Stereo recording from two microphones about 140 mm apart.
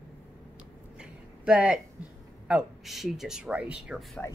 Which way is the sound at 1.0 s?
5° right (ahead or behind).